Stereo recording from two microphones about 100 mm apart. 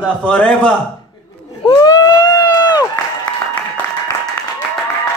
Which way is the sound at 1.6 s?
45° left (ahead or behind).